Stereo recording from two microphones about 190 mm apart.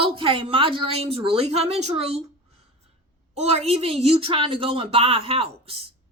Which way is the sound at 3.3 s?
35° right (ahead or behind).